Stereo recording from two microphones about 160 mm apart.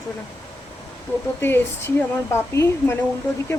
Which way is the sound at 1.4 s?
15° left (ahead or behind).